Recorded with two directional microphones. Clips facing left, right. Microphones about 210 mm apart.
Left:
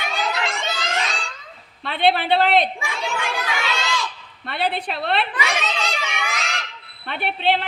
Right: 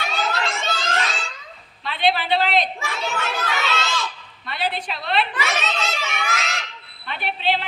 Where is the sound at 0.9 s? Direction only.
Centre (ahead or behind).